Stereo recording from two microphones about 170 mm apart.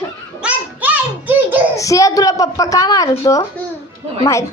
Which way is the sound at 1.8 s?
20° left (ahead or behind).